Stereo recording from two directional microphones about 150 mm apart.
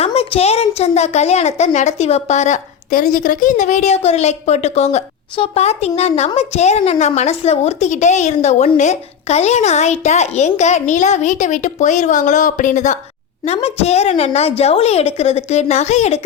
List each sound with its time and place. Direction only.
0.0 s speech: 40° left (ahead or behind)
13.4 s speech: 45° left (ahead or behind)